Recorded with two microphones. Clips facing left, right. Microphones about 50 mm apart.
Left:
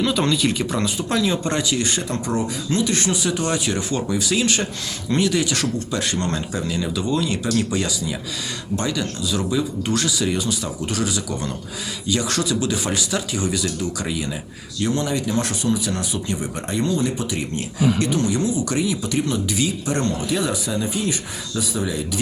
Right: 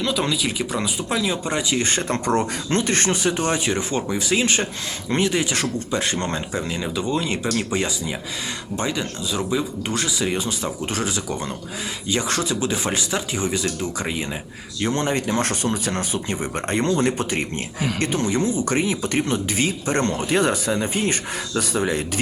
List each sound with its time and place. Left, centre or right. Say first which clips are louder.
0.0 s speech: left 3 dB; centre
1.7 s speech: right 1 dB; right
18.0 s speech: left 1 dB; right